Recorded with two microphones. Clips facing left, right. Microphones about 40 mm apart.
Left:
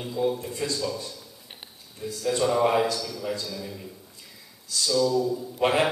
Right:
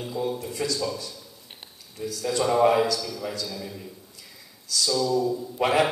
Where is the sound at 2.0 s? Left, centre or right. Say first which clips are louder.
Right 2 dB; centre.